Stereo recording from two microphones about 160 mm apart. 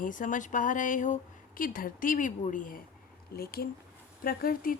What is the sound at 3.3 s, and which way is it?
Speech, 70° left (ahead or behind).